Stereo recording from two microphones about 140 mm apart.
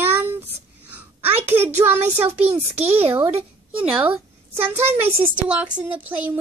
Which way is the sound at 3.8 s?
10° right (ahead or behind).